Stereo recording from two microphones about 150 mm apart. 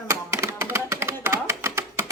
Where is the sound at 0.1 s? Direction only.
20° right (ahead or behind).